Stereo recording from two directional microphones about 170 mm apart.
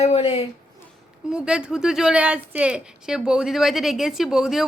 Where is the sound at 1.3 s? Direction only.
5° right (ahead or behind).